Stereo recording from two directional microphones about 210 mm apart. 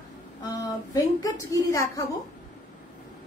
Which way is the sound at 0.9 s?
15° left (ahead or behind).